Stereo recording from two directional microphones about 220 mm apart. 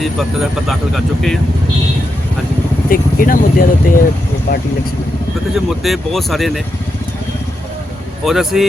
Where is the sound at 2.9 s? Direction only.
40° left (ahead or behind).